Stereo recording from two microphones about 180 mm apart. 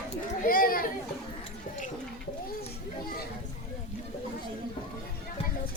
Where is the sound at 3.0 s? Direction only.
55° left (ahead or behind).